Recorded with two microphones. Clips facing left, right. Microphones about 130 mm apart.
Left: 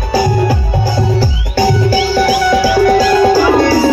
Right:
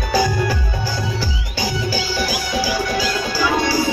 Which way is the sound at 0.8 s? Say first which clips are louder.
Left 9 dB; 45° left (ahead or behind).